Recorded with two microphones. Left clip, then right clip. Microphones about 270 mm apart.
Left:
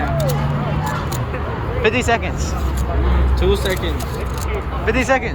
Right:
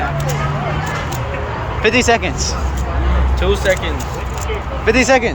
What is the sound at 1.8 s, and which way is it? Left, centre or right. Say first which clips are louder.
Speech: right 4 dB; centre.